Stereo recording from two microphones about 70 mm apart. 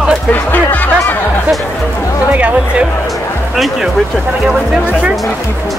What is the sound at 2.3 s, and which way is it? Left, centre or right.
Speech, right.